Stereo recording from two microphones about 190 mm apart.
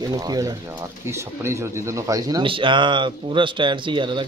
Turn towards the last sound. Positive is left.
turn(degrees=-25)  # may be behind; listen again after turning